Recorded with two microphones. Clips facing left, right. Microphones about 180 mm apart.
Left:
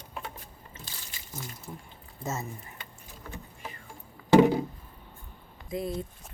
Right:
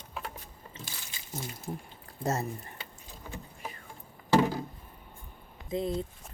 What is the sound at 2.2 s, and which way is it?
Speech, 35° right (ahead or behind).